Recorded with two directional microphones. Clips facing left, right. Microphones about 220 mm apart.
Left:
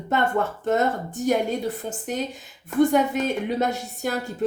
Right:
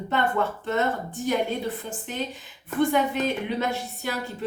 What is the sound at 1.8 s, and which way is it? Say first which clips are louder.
Speech: left 5 dB; 45° left (ahead or behind).